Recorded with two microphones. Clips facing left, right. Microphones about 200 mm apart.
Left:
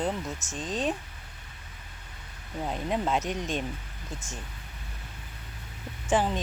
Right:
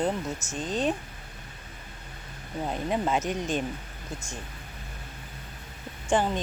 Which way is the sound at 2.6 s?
Centre (ahead or behind).